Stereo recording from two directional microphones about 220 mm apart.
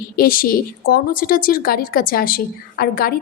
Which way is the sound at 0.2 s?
40° left (ahead or behind).